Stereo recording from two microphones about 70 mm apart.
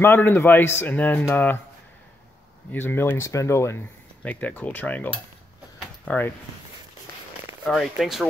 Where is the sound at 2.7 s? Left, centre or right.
Left.